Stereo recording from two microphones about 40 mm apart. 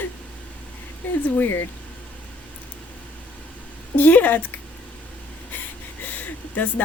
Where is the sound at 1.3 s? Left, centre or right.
Left.